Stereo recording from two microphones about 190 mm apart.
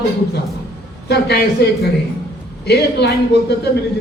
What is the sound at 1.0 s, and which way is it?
A man's voice, 60° left (ahead or behind).